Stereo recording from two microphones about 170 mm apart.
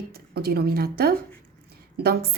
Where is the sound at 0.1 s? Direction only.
65° right (ahead or behind).